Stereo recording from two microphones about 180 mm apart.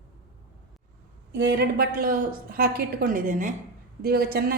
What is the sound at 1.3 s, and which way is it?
A woman's voice, 70° right (ahead or behind).